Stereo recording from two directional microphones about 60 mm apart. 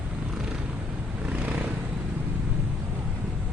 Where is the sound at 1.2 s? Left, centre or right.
Right.